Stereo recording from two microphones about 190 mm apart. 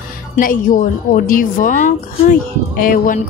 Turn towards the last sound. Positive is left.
turn(degrees=45)  # may be behind; listen again after turning